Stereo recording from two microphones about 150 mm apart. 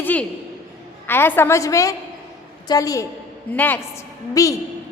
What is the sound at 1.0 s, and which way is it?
A woman's voice, 15° left (ahead or behind).